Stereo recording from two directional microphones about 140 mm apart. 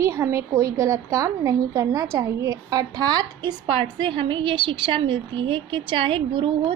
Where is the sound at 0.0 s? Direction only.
20° right (ahead or behind).